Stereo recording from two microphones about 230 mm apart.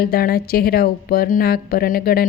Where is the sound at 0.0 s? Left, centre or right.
Left.